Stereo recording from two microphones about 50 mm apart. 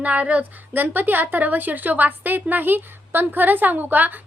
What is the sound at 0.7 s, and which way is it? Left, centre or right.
A woman's voice, right.